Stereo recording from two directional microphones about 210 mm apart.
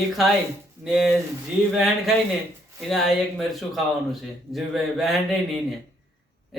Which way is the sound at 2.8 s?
Centre (ahead or behind).